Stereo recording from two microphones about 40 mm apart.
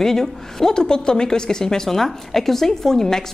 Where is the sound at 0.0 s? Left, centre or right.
Centre.